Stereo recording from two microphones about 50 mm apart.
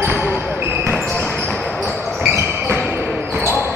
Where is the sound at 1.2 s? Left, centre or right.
Centre.